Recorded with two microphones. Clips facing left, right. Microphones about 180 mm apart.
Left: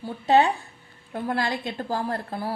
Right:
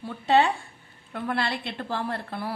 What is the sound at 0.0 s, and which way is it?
A woman's voice, 35° left (ahead or behind).